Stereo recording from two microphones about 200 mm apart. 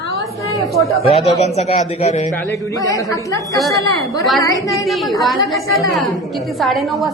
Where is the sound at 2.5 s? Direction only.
15° left (ahead or behind).